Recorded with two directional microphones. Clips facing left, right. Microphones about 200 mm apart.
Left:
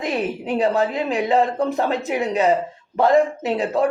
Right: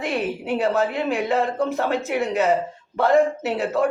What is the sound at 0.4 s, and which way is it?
Speech, 15° left (ahead or behind).